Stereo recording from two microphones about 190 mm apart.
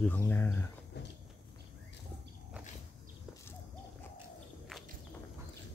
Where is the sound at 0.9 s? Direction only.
65° left (ahead or behind).